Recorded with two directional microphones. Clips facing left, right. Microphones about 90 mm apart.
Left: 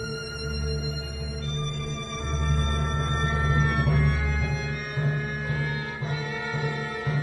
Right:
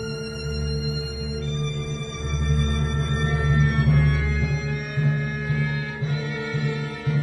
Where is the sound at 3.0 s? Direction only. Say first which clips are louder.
Right 2 dB; 30° left (ahead or behind).